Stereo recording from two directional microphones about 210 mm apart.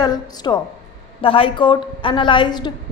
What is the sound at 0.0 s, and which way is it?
A woman's voice, 20° left (ahead or behind).